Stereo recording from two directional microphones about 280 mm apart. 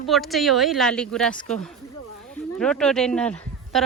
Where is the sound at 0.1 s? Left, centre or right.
Centre.